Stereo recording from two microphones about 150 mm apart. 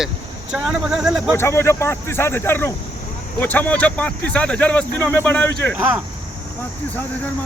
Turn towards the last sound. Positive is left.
turn(degrees=10)  # may be behind; listen again after turning